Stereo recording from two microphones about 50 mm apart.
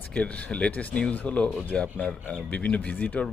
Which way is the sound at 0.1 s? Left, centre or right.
Left.